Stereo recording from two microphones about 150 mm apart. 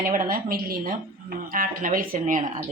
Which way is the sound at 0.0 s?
65° right (ahead or behind).